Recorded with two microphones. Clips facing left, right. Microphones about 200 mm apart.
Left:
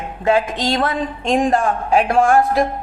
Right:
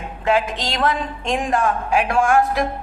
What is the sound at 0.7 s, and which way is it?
Speech, 35° left (ahead or behind).